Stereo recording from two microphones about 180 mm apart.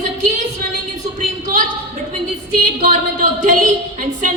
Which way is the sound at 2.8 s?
45° right (ahead or behind).